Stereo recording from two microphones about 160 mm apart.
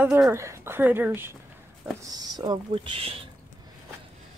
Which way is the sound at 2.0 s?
25° right (ahead or behind).